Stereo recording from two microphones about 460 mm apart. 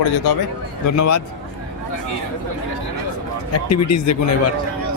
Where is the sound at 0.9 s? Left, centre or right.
Left.